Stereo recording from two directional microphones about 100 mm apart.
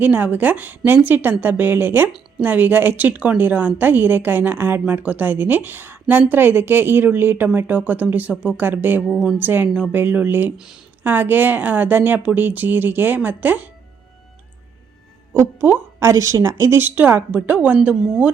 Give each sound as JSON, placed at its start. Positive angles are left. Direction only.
{"t": 0.0, "sound": "a woman's voice", "side_deg": -15}
{"t": 9.0, "sound": "a woman's voice", "side_deg": -5}
{"t": 9.4, "sound": "a woman's voice", "side_deg": -20}
{"t": 9.6, "sound": "a woman's voice", "side_deg": -5}
{"t": 9.9, "sound": "a woman's voice", "side_deg": -15}
{"t": 15.3, "sound": "a woman's voice", "side_deg": -25}